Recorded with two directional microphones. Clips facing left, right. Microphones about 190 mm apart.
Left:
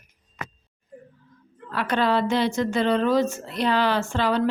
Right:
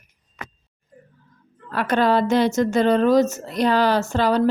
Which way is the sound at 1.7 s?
45° right (ahead or behind).